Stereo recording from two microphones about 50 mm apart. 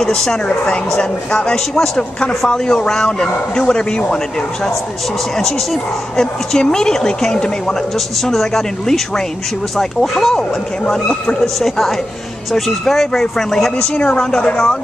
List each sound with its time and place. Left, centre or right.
0.0 s a woman's voice: centre
5.4 s a woman's voice: centre
10.9 s a woman's voice: left
11.4 s a woman's voice: centre
13.9 s a woman's voice: left